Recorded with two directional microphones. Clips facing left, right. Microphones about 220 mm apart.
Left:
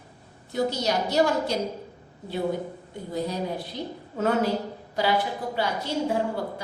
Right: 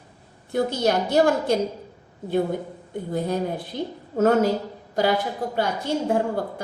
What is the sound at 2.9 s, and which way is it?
A woman's voice, 55° right (ahead or behind).